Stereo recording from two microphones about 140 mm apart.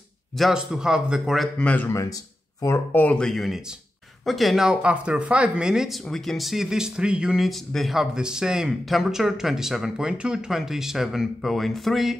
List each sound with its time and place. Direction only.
0.4 s speech: 5° right (ahead or behind)
1.9 s speech: 20° left (ahead or behind); by 12.2 s centre (ahead or behind)